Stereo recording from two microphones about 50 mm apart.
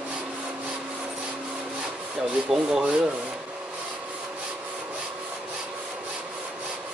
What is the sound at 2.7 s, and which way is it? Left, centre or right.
Rub, right.